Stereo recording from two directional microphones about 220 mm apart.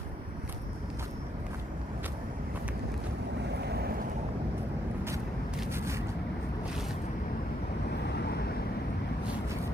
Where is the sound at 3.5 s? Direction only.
50° right (ahead or behind).